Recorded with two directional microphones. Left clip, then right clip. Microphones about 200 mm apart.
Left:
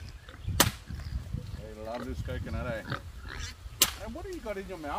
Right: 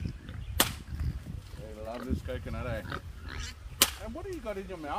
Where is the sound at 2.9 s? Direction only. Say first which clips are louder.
Left 1 dB; 10° left (ahead or behind).